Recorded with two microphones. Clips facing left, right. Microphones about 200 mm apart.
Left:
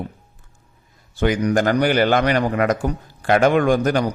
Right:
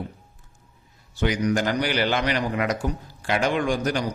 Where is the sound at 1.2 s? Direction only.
55° left (ahead or behind).